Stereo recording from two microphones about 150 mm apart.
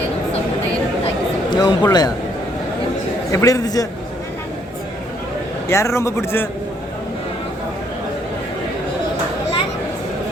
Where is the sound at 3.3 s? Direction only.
25° left (ahead or behind).